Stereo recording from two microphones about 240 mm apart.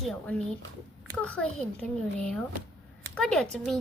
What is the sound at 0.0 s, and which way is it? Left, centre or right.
Speech, centre.